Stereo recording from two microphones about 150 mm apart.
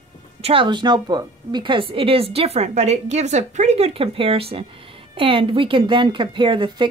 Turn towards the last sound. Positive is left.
turn(degrees=-35)  # may be behind; listen again after turning